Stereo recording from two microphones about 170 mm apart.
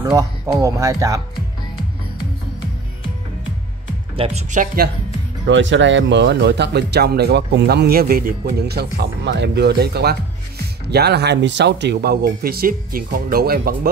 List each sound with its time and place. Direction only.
0.0 s speech: 20° right (ahead or behind)
4.2 s speech: 40° right (ahead or behind)
5.5 s speech: 90° right; by 13.7 s 60° right (ahead or behind)